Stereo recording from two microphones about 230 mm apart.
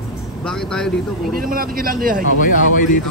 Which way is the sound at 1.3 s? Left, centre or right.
Right.